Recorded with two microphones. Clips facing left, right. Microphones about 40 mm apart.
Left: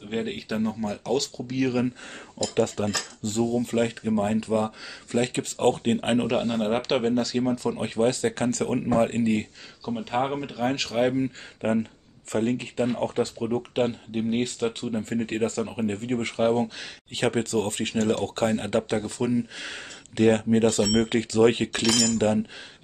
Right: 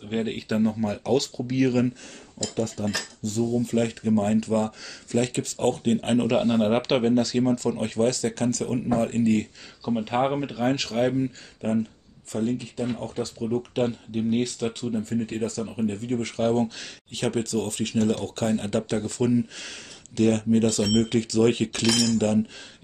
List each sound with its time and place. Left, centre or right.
0.1 s speech: centre
2.5 s speech: left
3.7 s speech: centre
6.3 s speech: centre
8.2 s speech: left
9.8 s speech: centre
11.6 s speech: left
12.3 s speech: left
13.6 s speech: left
15.0 s speech: left
16.3 s speech: centre
17.2 s speech: left; by 19.7 s centre
19.7 s speech: left